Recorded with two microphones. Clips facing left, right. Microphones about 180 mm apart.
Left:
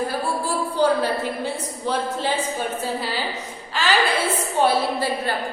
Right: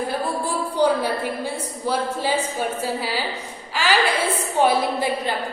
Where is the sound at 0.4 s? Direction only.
15° right (ahead or behind).